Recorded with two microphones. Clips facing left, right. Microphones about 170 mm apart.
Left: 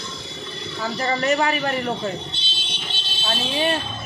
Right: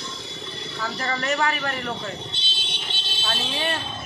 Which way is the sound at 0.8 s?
20° left (ahead or behind).